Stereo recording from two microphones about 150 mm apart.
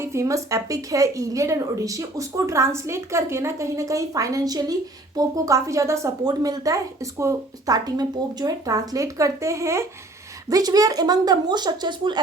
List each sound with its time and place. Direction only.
0.0 s a woman's voice: 20° right (ahead or behind)